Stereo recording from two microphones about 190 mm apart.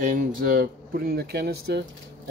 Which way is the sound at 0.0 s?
45° right (ahead or behind).